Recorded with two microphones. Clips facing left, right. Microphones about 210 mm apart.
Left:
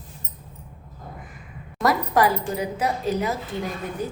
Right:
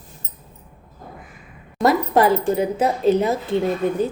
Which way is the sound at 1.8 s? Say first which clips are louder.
Right 4 dB; 25° right (ahead or behind).